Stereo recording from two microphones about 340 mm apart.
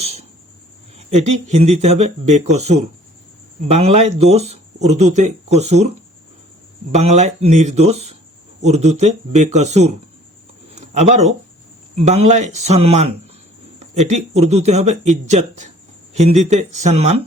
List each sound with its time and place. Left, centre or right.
1.5 s speech: centre
6.9 s speech: centre
14.1 s speech: centre